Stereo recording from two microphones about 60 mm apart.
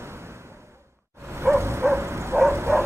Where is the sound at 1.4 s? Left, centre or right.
Right.